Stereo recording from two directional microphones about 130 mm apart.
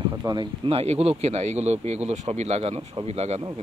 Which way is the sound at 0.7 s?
50° right (ahead or behind).